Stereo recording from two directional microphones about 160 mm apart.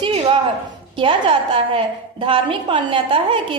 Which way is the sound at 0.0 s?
35° right (ahead or behind).